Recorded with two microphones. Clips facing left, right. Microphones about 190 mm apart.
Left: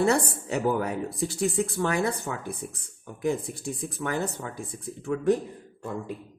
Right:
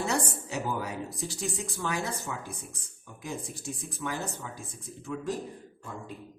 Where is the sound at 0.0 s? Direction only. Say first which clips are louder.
Left 7 dB; 60° left (ahead or behind).